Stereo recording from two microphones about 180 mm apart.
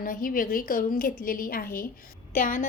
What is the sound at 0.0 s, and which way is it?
A woman's voice, 50° left (ahead or behind).